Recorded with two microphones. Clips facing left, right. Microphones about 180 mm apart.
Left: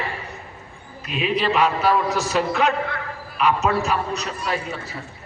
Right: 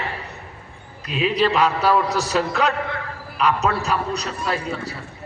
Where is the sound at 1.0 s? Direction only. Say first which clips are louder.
Right 2 dB; 35° right (ahead or behind).